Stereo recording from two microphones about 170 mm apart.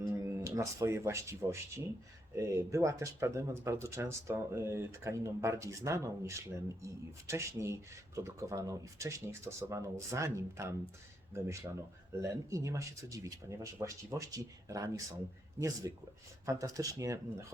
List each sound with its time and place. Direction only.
0.0 s speech: 20° right (ahead or behind)